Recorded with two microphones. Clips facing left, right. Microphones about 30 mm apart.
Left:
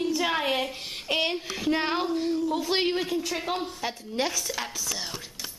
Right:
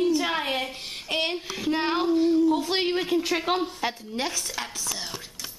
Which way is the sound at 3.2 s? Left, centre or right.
Centre.